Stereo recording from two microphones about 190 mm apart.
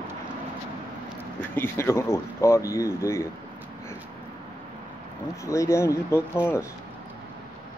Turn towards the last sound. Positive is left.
turn(degrees=10)  # may be behind; listen again after turning